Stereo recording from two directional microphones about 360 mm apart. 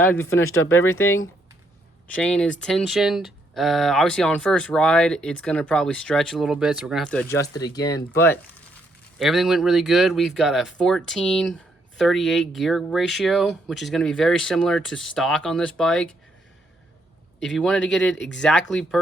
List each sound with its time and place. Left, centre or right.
0.0 s speech: centre
0.3 s speech: left
2.0 s speech: centre
17.4 s speech: centre